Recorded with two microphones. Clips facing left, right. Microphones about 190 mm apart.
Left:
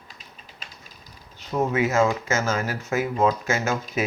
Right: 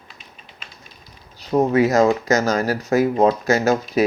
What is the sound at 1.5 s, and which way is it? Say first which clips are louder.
Speech: right 6 dB; 35° right (ahead or behind).